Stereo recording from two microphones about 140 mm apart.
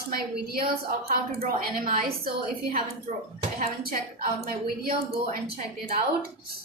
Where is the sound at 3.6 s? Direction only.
90° right.